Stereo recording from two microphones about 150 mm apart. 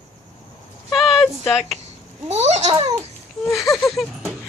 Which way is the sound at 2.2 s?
50° right (ahead or behind).